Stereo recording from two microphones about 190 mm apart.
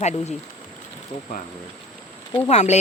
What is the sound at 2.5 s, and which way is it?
Speech, 35° left (ahead or behind).